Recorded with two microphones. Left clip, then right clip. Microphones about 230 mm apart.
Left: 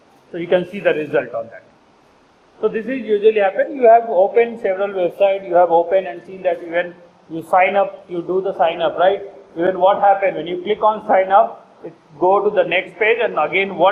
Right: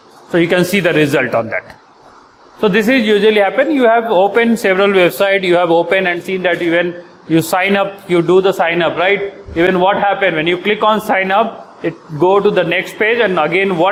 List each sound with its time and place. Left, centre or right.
0.3 s a man's voice: right